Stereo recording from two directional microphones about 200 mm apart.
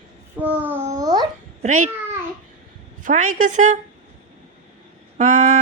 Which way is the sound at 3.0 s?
40° right (ahead or behind).